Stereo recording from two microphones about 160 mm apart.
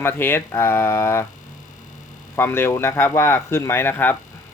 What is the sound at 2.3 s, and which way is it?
Speech, 15° left (ahead or behind).